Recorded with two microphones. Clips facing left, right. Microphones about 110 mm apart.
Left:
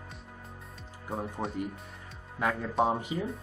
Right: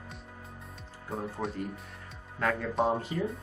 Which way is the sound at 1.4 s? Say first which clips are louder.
Right 2 dB; 30° left (ahead or behind).